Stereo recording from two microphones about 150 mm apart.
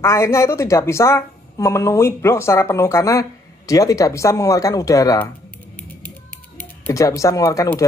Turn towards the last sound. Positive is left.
turn(degrees=20)  # may be behind; listen again after turning